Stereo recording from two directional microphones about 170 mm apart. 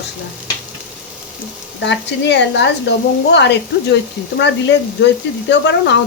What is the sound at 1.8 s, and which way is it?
Speech, 90° left.